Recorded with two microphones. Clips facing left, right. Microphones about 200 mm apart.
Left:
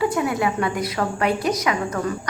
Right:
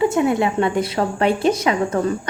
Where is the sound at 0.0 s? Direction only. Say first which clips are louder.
Right 4 dB; 25° right (ahead or behind).